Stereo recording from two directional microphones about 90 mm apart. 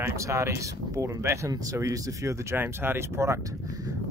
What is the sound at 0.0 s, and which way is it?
Speech, 35° right (ahead or behind).